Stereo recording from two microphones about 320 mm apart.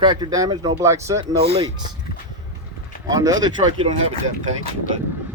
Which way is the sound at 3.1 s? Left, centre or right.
Centre.